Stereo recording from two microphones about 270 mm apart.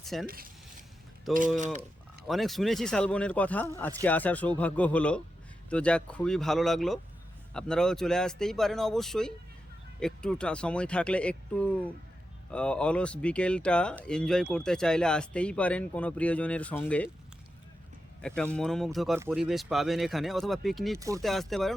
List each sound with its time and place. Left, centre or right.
0.0 s speech: centre
0.3 s a sound: right
2.2 s speech: centre
18.2 s speech: centre